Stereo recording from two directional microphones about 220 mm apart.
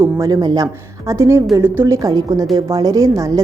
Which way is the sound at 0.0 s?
15° right (ahead or behind).